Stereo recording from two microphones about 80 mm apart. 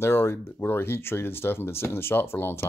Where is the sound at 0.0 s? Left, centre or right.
Left.